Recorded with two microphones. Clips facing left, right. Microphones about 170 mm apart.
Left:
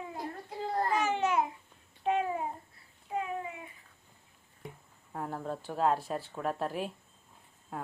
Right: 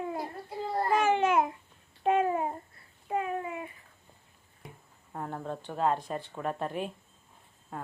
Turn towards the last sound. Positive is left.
turn(degrees=5)  # may be behind; listen again after turning